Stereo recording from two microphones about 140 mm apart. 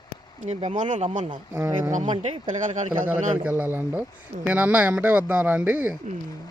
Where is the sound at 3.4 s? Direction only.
15° right (ahead or behind).